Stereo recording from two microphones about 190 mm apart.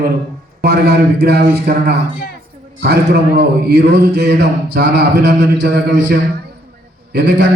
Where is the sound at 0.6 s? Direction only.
60° right (ahead or behind).